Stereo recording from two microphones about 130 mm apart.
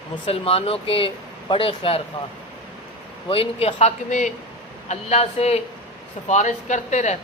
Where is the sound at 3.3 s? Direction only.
50° left (ahead or behind).